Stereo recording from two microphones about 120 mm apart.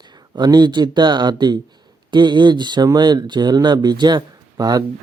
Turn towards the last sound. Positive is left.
turn(degrees=-35)  # may be behind; listen again after turning